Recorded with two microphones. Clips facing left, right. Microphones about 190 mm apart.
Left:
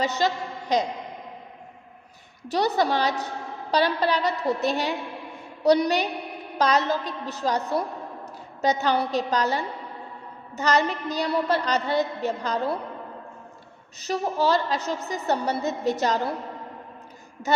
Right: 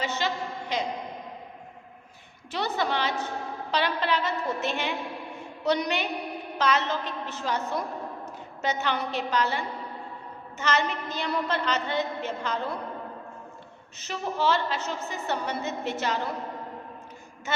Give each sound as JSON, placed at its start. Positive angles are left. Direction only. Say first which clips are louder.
{"t": 0.2, "sound": "a woman's voice", "louder": "left 4 dB", "side_deg": 40}
{"t": 2.5, "sound": "a woman's voice", "louder": "left 6 dB", "side_deg": 40}
{"t": 14.0, "sound": "a woman's voice", "louder": "left 4 dB", "side_deg": 40}